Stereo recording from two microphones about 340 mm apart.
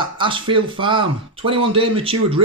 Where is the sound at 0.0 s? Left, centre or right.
Centre.